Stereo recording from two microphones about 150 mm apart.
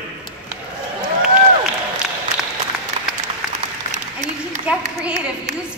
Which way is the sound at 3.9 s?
55° right (ahead or behind).